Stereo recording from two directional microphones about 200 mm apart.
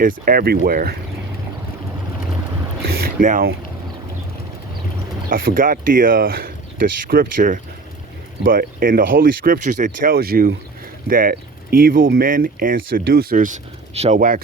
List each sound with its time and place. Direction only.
0.0 s speech: 45° right (ahead or behind)
3.2 s speech: 45° right (ahead or behind)
5.3 s speech: 45° right (ahead or behind)
14.2 s speech: 45° right (ahead or behind)